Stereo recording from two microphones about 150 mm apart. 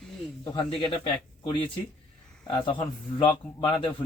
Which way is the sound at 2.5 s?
35° left (ahead or behind).